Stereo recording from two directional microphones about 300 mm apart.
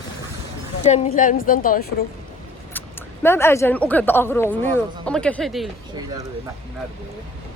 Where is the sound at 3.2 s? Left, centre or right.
Centre.